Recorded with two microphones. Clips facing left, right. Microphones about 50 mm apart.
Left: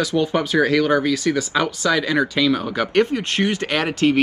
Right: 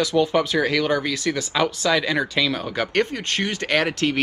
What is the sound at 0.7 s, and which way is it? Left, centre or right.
Speech, centre.